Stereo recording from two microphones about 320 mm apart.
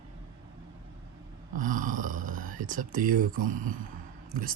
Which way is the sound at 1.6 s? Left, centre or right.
Right.